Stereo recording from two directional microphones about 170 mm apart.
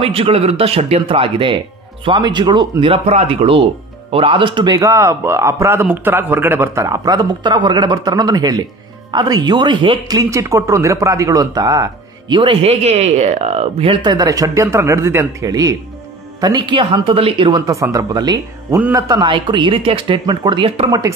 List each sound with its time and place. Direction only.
0.0 s speech: 35° right (ahead or behind)
18.8 s a man's voice: 10° right (ahead or behind)
19.0 s speech: 25° right (ahead or behind)